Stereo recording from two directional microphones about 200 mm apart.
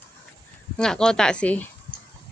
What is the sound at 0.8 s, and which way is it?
Speech, 5° left (ahead or behind).